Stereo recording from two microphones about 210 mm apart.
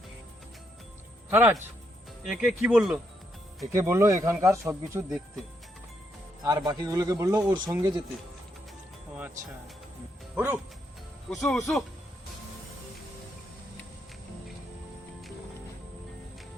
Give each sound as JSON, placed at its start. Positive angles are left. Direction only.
{"t": 1.3, "sound": "speech", "side_deg": -10}
{"t": 6.4, "sound": "speech", "side_deg": -20}
{"t": 10.3, "sound": "speech", "side_deg": -10}